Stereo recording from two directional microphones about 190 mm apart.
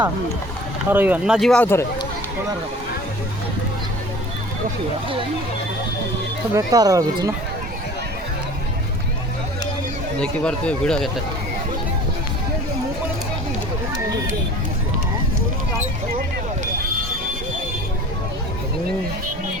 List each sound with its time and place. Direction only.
0.9 s speech: 10° right (ahead or behind); by 2.0 s 15° left (ahead or behind)
6.5 s speech: 20° right (ahead or behind)
10.2 s speech: 5° left (ahead or behind)